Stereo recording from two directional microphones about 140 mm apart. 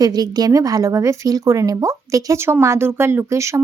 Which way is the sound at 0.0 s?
30° right (ahead or behind).